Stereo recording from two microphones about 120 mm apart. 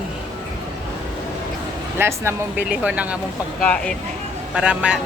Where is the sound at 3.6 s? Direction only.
10° left (ahead or behind).